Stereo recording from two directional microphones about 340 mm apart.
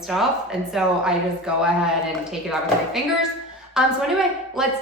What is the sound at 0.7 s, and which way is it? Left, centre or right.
Speech, centre.